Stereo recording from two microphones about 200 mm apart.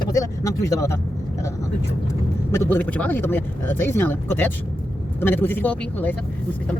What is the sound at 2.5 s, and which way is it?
Speech, 10° left (ahead or behind).